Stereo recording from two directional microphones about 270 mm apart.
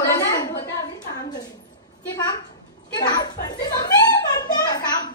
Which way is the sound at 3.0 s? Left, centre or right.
Centre.